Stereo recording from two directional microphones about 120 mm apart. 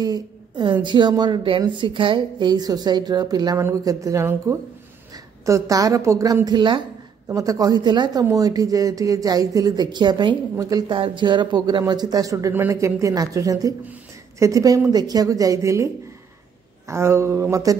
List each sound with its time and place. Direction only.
0.0 s a woman's voice: 40° right (ahead or behind)